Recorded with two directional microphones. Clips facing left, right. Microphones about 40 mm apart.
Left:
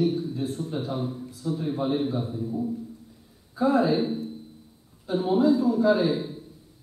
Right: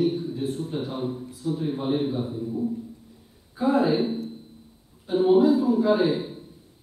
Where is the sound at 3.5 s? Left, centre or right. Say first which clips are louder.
Even; centre.